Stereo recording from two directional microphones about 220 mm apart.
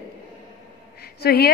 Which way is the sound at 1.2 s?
45° left (ahead or behind).